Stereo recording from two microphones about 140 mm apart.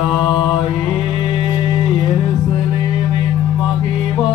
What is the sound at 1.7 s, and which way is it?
Music, 30° left (ahead or behind).